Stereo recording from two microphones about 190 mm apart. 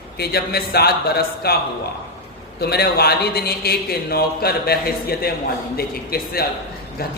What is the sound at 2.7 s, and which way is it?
A man's voice, 55° left (ahead or behind).